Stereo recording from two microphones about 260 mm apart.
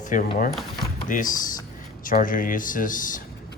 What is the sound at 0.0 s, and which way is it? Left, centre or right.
Speech, left.